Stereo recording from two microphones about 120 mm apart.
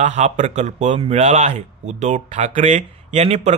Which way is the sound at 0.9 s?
65° right (ahead or behind).